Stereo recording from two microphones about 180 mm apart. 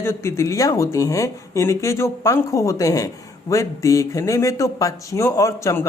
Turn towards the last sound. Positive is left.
turn(degrees=15)  # may be behind; listen again after turning